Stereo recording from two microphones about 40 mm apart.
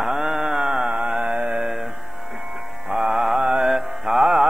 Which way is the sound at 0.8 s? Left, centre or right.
Right.